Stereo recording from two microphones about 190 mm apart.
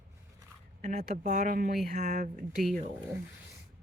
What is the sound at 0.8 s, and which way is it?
Speech, 40° right (ahead or behind).